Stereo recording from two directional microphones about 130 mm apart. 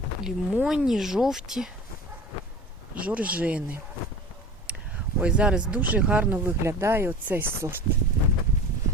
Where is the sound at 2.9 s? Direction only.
10° right (ahead or behind).